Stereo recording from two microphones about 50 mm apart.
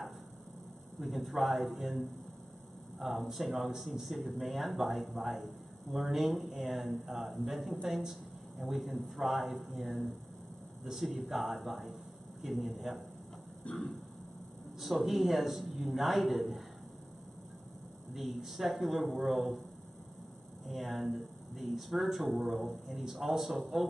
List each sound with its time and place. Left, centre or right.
0.9 s speech: centre
13.7 s a sound: left
14.8 s speech: centre
18.1 s speech: centre
20.6 s speech: centre